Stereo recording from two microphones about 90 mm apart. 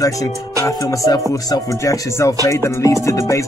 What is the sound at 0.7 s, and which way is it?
Speech, 40° left (ahead or behind).